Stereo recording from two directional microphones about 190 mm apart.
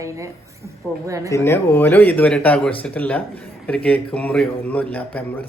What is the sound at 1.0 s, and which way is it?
Speech, 15° right (ahead or behind).